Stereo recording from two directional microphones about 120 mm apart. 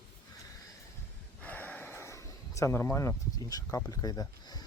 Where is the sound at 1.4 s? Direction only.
15° left (ahead or behind); by 3.8 s 30° left (ahead or behind).